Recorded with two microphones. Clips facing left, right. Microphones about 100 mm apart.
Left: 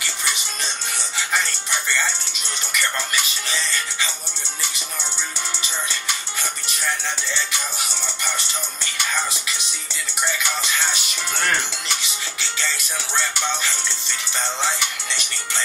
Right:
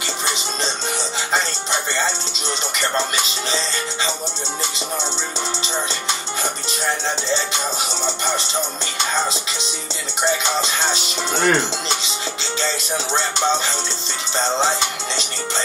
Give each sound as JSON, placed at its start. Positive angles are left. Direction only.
{"t": 0.0, "sound": "music", "side_deg": -20}
{"t": 7.2, "sound": "music", "side_deg": -25}